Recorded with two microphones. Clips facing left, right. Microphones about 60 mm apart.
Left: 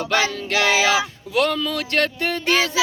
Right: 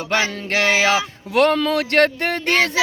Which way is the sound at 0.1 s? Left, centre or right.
Right.